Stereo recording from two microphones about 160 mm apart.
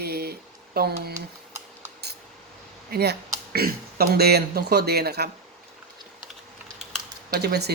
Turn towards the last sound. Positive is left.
turn(degrees=-90)